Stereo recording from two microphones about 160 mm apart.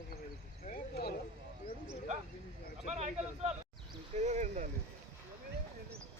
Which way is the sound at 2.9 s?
45° right (ahead or behind).